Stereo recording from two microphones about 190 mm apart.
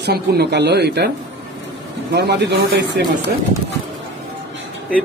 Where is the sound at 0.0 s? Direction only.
60° right (ahead or behind).